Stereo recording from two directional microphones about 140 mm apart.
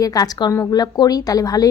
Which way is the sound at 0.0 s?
25° left (ahead or behind).